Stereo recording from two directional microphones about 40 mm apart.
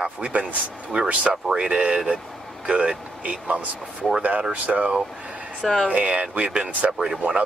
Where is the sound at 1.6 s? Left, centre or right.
Centre.